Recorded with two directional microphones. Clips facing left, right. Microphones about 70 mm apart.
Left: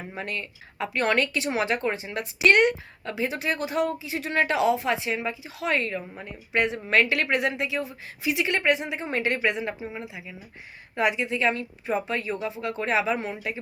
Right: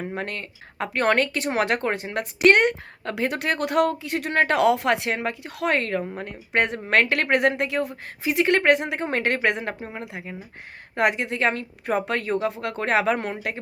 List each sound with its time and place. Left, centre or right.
0.1 s speech: right